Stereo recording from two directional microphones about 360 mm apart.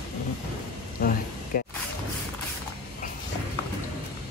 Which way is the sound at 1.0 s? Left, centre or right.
Left.